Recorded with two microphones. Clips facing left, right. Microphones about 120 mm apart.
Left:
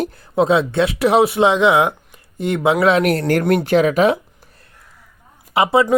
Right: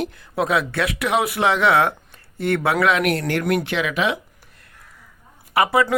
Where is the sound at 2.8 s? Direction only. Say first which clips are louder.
Left 4 dB; 35° left (ahead or behind).